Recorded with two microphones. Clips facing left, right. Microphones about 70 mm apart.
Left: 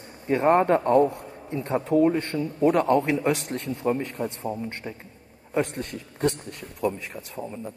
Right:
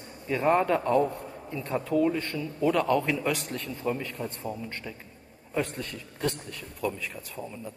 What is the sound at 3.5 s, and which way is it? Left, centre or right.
Speech, left.